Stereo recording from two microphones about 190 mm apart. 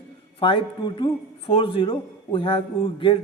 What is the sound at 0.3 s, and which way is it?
A man's voice, 25° left (ahead or behind).